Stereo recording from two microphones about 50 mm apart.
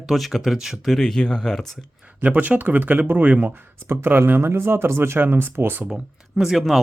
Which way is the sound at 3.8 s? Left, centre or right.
Right.